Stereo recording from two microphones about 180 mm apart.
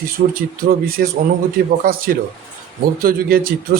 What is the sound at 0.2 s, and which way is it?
A man's voice, 55° right (ahead or behind).